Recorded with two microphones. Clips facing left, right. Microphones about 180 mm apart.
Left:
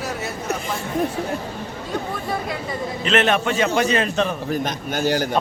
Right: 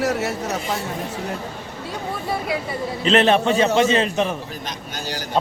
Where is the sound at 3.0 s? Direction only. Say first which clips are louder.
Right 3 dB; 30° right (ahead or behind).